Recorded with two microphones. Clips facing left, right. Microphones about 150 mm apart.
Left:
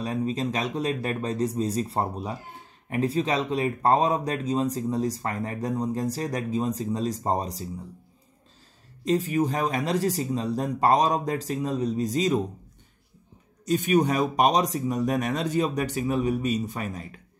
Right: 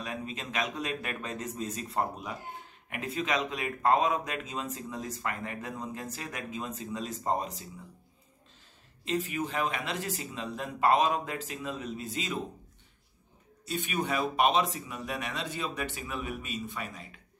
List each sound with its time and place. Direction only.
0.0 s speech: 35° left (ahead or behind)
9.0 s speech: 40° left (ahead or behind)
13.7 s speech: 40° left (ahead or behind)